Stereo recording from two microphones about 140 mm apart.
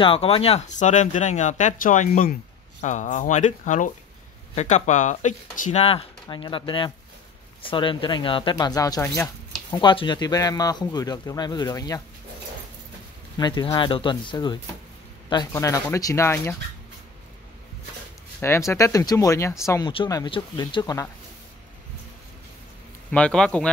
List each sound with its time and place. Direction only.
0.0 s speech: 40° left (ahead or behind)
6.2 s speech: 35° left (ahead or behind)
9.8 s speech: 35° left (ahead or behind)
13.4 s speech: 30° left (ahead or behind)
15.5 s speech: 20° left (ahead or behind)
18.4 s speech: 20° left (ahead or behind)
20.2 s speech: 35° left (ahead or behind)
23.1 s speech: 5° left (ahead or behind)